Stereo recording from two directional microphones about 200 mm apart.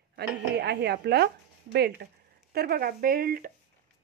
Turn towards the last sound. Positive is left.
turn(degrees=-45)  # may be behind; listen again after turning